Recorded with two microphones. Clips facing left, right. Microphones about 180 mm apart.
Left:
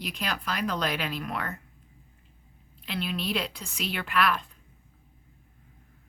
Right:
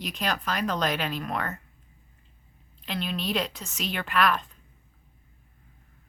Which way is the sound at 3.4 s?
5° left (ahead or behind).